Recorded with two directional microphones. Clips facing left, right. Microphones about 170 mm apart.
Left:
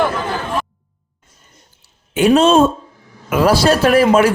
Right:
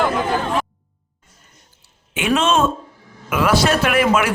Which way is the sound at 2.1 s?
35° left (ahead or behind).